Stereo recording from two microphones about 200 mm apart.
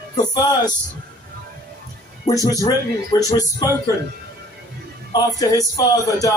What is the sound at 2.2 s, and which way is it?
Speech, 15° left (ahead or behind).